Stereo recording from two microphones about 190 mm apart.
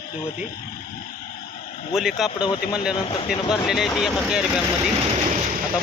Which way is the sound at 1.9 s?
Centre (ahead or behind).